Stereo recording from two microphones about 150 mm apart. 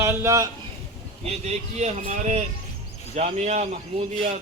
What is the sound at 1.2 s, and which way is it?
A man's voice, 45° right (ahead or behind).